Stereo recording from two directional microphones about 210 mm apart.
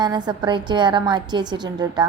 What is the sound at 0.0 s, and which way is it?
A woman's voice, 20° right (ahead or behind).